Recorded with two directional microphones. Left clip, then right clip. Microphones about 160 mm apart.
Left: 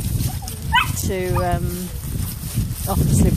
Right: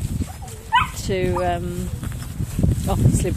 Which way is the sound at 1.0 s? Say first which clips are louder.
Right 1 dB; 25° right (ahead or behind).